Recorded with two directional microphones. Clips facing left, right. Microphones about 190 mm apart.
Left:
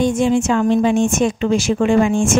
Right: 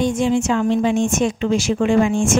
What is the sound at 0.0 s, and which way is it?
A woman's voice, 50° left (ahead or behind).